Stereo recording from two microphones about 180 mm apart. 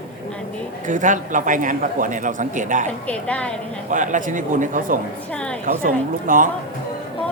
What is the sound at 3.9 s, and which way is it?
A man's voice, 45° right (ahead or behind).